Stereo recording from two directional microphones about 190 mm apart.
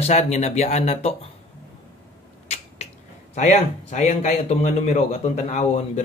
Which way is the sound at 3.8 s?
35° left (ahead or behind).